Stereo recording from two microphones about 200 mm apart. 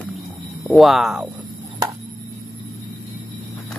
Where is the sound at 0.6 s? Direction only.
Centre (ahead or behind).